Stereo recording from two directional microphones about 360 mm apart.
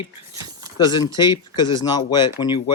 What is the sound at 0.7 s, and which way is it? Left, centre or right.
Speech, centre.